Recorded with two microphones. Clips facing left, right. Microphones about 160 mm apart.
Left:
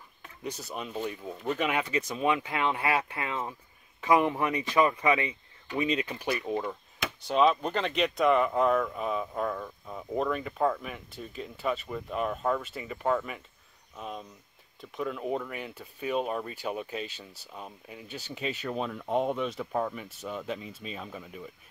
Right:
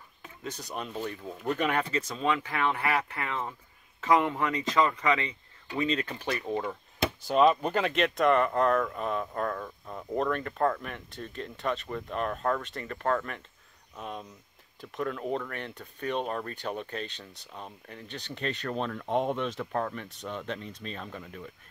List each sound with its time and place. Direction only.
0.4 s speech: 5° left (ahead or behind)
2.0 s speech: 20° left (ahead or behind)
7.2 s speech: centre (ahead or behind)